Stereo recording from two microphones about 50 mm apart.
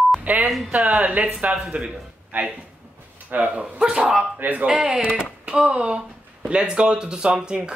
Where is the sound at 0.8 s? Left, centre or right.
Right.